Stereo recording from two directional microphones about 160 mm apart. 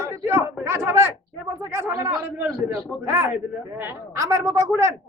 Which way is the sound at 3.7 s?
15° right (ahead or behind).